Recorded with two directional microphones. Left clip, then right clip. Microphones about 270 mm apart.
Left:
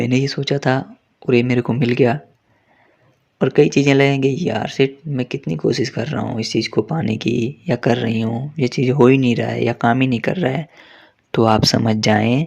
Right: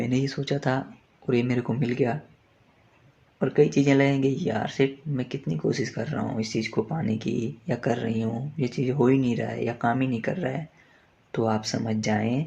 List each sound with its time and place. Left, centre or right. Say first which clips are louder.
0.0 s speech: left 8 dB; left
3.3 s speech: left 7 dB; left